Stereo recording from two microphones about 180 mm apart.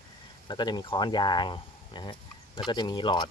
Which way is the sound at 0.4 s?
25° left (ahead or behind).